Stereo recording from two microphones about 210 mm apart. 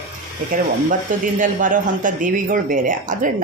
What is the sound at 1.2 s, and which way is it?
Speech, 40° right (ahead or behind).